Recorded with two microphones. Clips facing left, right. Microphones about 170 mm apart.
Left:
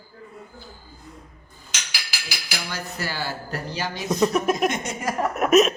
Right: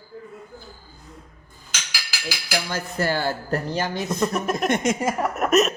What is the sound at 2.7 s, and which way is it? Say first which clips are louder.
A man's voice: right 7 dB; 50° right (ahead or behind).